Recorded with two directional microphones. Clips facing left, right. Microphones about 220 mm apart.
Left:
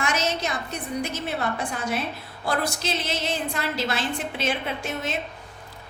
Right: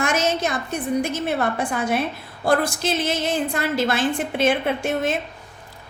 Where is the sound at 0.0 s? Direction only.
50° right (ahead or behind).